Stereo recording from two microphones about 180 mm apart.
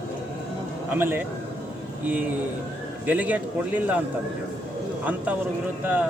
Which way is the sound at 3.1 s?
10° right (ahead or behind).